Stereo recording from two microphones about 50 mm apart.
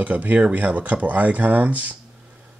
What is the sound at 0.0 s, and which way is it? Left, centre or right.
Speech, right.